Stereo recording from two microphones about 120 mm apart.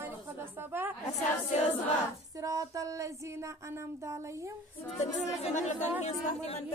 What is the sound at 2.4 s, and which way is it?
Speech, 25° right (ahead or behind).